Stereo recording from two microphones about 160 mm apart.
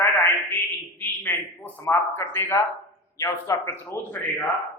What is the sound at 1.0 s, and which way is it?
A man's voice, 10° left (ahead or behind).